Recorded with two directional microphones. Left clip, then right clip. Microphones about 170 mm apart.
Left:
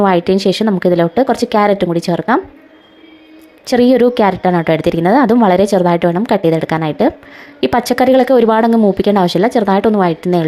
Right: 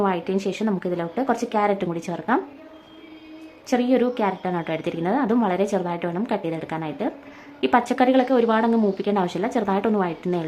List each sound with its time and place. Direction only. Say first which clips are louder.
0.0 s a woman's voice: left 12 dB; 40° left (ahead or behind)
3.7 s a woman's voice: left 11 dB; 40° left (ahead or behind)